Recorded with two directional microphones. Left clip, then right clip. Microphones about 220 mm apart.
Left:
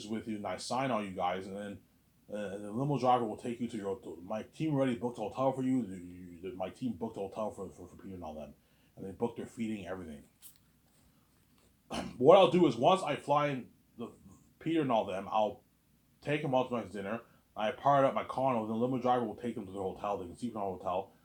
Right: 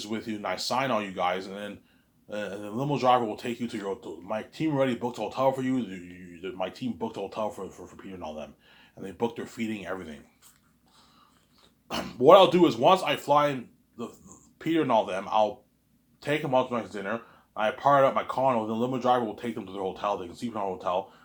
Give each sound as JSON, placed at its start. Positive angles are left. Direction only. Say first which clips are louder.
{"t": 0.0, "sound": "speech", "louder": "right 6 dB", "side_deg": -20}
{"t": 11.9, "sound": "speech", "louder": "right 6 dB", "side_deg": -20}
{"t": 14.6, "sound": "speech", "louder": "right 7 dB", "side_deg": -25}